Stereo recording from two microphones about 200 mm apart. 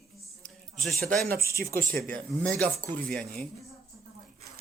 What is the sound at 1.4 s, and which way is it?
A man's voice, 15° left (ahead or behind).